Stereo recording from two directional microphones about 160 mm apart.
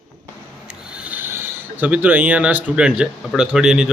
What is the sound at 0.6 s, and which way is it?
Speech, 5° right (ahead or behind).